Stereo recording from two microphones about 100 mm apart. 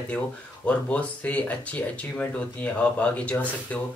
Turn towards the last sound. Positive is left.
turn(degrees=15)  # may be behind; listen again after turning